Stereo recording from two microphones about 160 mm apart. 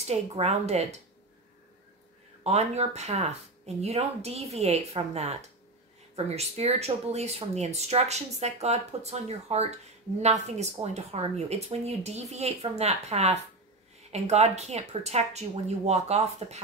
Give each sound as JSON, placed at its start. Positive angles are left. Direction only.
{"t": 0.0, "sound": "speech", "side_deg": -40}
{"t": 2.4, "sound": "speech", "side_deg": -40}